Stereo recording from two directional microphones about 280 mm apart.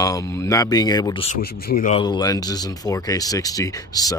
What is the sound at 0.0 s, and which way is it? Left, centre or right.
Speech, centre.